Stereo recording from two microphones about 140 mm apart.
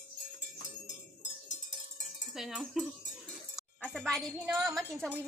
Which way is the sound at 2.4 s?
Centre (ahead or behind).